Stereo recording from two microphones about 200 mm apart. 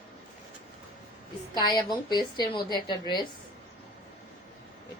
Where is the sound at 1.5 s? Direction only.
20° left (ahead or behind).